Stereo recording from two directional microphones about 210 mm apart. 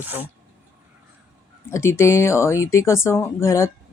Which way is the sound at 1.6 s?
10° left (ahead or behind).